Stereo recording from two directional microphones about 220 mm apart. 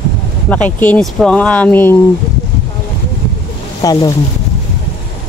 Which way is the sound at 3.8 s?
15° left (ahead or behind).